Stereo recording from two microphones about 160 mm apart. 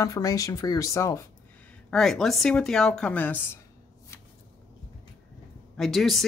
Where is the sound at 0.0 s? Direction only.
20° left (ahead or behind).